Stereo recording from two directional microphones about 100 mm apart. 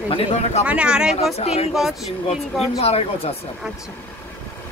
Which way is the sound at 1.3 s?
90° left.